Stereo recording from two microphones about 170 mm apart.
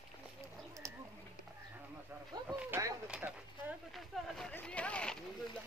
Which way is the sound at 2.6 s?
15° right (ahead or behind).